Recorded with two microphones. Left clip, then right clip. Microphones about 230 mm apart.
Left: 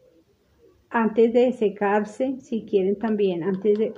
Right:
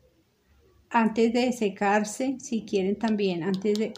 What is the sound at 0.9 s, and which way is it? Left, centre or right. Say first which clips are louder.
A woman's voice: left 4 dB; right.